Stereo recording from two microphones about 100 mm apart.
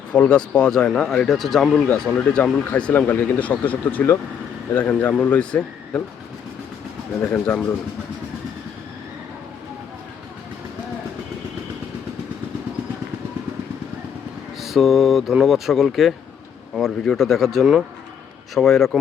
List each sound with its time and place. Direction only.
0.1 s speech: 10° left (ahead or behind)
1.9 s speech: 15° left (ahead or behind)
7.2 s speech: 20° left (ahead or behind)
14.6 s speech: centre (ahead or behind)